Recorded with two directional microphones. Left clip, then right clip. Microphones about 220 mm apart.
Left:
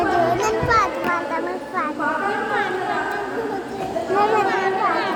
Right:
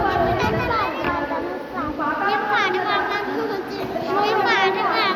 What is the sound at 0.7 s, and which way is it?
Children playing, 40° left (ahead or behind).